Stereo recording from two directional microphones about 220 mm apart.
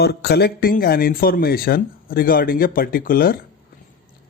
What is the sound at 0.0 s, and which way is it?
Speech, 50° left (ahead or behind).